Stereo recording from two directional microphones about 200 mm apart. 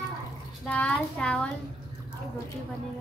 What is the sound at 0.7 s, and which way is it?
Speech, 5° left (ahead or behind).